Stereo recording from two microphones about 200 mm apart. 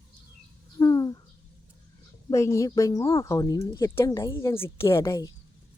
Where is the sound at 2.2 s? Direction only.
15° left (ahead or behind).